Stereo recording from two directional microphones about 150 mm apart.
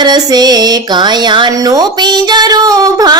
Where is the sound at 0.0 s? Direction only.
30° right (ahead or behind).